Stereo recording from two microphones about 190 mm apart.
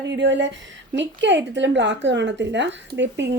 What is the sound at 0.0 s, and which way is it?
A woman's voice, 70° right (ahead or behind).